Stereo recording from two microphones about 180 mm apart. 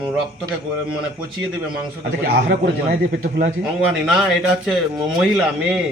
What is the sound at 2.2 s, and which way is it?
Speech, 65° right (ahead or behind).